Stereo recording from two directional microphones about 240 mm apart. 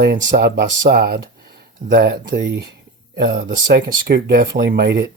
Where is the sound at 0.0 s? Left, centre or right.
Right.